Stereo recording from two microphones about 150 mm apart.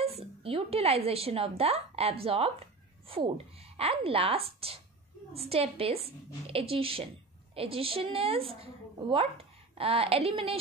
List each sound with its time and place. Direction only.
0.0 s a woman's voice: 40° right (ahead or behind)